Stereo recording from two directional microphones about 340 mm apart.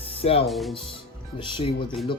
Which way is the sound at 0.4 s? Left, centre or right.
Centre.